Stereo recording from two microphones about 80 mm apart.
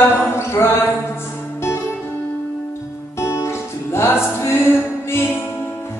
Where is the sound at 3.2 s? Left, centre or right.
Left.